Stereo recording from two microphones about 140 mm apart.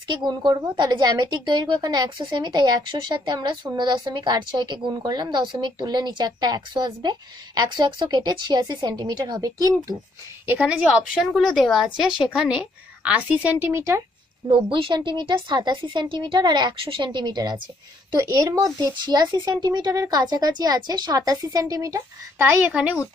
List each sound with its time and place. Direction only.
0.1 s a woman's voice: 30° right (ahead or behind)
10.4 s a woman's voice: 10° right (ahead or behind)
14.7 s a woman's voice: 35° right (ahead or behind)
22.7 s a woman's voice: 10° right (ahead or behind)